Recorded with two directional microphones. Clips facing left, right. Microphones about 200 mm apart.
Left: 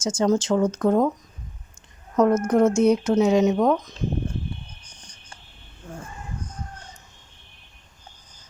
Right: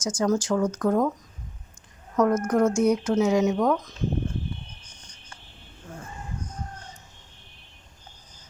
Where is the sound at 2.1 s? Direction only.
30° left (ahead or behind).